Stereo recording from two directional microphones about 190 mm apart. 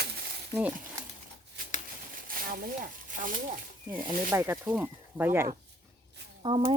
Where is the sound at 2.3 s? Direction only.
50° right (ahead or behind).